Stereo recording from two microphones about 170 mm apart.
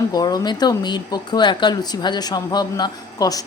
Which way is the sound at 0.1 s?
25° left (ahead or behind).